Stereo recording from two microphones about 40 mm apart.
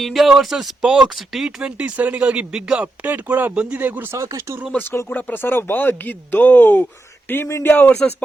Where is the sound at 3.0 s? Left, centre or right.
Right.